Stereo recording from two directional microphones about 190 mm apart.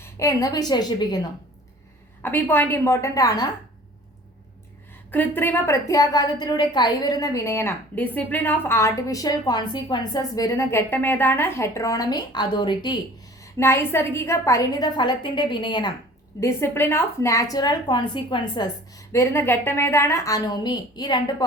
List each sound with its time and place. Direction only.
0.0 s a woman's voice: 15° left (ahead or behind)
2.2 s a woman's voice: 10° left (ahead or behind)
5.1 s a woman's voice: 10° left (ahead or behind)
13.4 s a woman's voice: 15° left (ahead or behind)
16.4 s a woman's voice: 15° left (ahead or behind)